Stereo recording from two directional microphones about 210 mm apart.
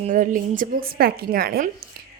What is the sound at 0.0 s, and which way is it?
A woman's voice, 40° right (ahead or behind).